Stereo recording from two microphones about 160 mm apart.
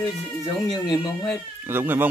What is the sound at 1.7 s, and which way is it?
Speech, 15° right (ahead or behind).